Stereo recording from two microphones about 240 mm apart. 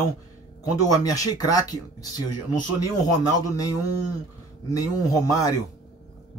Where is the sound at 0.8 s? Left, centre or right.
Centre.